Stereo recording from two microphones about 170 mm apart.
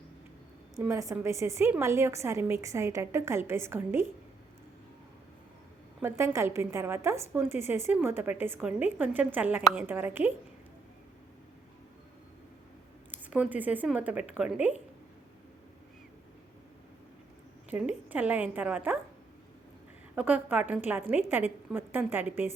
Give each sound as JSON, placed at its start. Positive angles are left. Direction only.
{"t": 0.8, "sound": "a woman's voice", "side_deg": -15}
{"t": 6.0, "sound": "a woman's voice", "side_deg": -15}
{"t": 13.1, "sound": "a woman's voice", "side_deg": -10}
{"t": 17.7, "sound": "a woman's voice", "side_deg": -10}
{"t": 20.1, "sound": "a woman's voice", "side_deg": -10}